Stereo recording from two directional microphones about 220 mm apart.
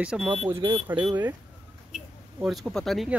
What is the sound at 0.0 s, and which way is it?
Speech, 5° right (ahead or behind).